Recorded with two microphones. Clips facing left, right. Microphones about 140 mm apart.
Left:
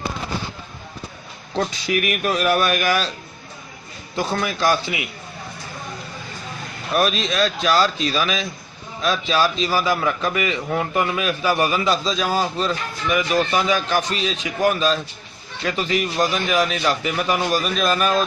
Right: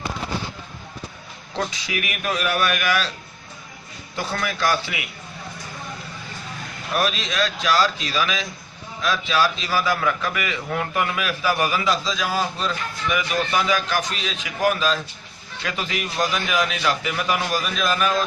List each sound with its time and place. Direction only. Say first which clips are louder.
1.9 s a man's voice: left 6 dB; 45° left (ahead or behind)
4.3 s a man's voice: left 3 dB; 25° left (ahead or behind)
7.0 s a man's voice: left 4 dB; 35° left (ahead or behind)